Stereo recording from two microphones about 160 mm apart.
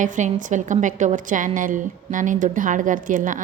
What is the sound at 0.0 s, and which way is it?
A woman's voice, 50° right (ahead or behind).